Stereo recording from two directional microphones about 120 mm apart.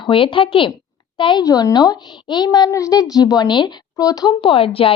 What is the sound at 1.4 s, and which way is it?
Speech, 35° left (ahead or behind).